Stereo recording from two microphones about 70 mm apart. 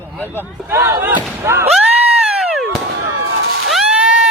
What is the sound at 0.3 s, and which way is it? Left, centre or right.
Speech, right.